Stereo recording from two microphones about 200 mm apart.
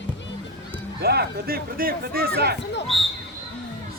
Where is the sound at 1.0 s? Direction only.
50° right (ahead or behind).